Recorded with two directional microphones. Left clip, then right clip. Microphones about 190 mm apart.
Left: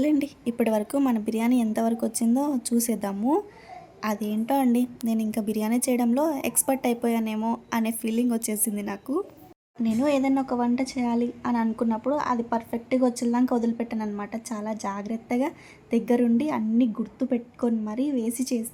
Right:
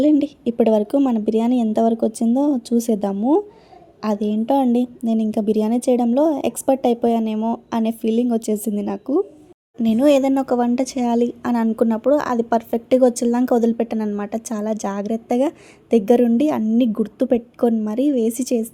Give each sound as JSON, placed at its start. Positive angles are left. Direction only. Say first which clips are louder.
{"t": 0.0, "sound": "speech", "louder": "right 8 dB", "side_deg": -25}